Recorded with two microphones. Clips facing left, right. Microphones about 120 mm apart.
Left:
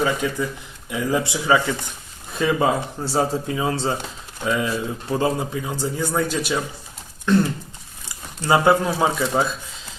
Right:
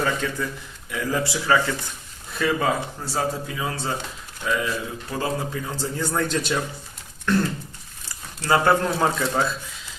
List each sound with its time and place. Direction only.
0.0 s speech: 15° left (ahead or behind)
5.6 s speech: 15° left (ahead or behind)
8.4 s speech: 15° left (ahead or behind)